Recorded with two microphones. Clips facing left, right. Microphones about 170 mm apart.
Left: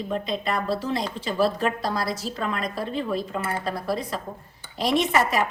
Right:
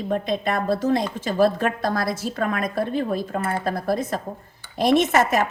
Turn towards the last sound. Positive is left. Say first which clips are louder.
# right 4 dB
turn(degrees=-45)  # may be behind; listen again after turning